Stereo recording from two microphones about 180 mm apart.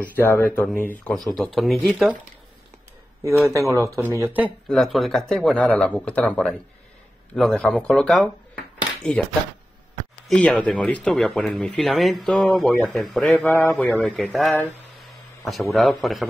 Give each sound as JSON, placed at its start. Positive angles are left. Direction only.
{"t": 0.0, "sound": "speech", "side_deg": 10}
{"t": 3.3, "sound": "speech", "side_deg": -15}
{"t": 4.6, "sound": "speech", "side_deg": 0}
{"t": 10.3, "sound": "speech", "side_deg": 5}
{"t": 15.7, "sound": "speech", "side_deg": 0}